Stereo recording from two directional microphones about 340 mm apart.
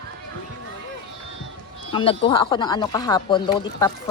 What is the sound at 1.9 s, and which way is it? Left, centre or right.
Speech, centre.